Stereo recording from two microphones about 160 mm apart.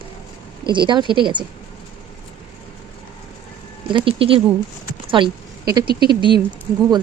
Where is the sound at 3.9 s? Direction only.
30° right (ahead or behind).